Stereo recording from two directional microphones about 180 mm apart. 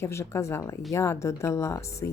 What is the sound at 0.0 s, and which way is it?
Speech, 15° left (ahead or behind).